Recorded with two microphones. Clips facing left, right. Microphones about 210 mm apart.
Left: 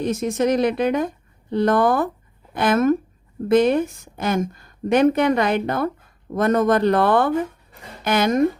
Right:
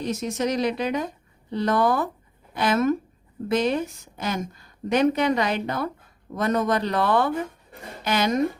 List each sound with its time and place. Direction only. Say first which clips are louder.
0.0 s a woman's voice: left 5 dB; 50° left (ahead or behind)